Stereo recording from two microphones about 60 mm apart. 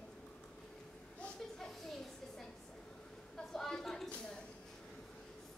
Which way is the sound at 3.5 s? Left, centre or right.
Centre.